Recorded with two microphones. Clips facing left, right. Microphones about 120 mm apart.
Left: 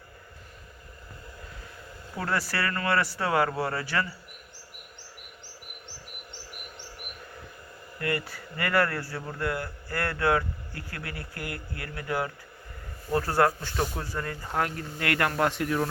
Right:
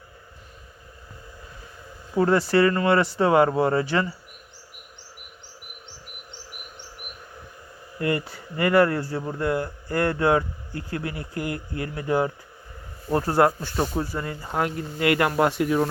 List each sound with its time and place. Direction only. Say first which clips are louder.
2.1 s speech: right 11 dB; 20° right (ahead or behind)
7.9 s speech: right 5 dB; 20° right (ahead or behind)